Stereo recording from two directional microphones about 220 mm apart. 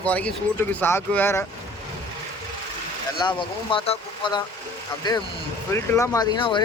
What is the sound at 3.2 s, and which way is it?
Speech, 20° left (ahead or behind).